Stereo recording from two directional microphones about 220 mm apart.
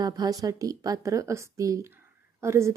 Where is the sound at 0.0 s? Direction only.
15° right (ahead or behind).